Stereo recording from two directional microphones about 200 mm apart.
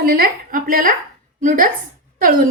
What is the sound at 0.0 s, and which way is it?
A woman's voice, 50° right (ahead or behind).